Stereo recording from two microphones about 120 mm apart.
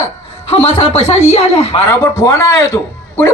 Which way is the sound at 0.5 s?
55° left (ahead or behind).